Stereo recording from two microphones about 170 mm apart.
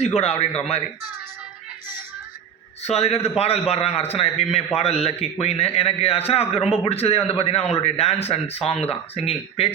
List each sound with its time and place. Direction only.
0.2 s a man's voice: 40° left (ahead or behind)
2.8 s a man's voice: 35° left (ahead or behind)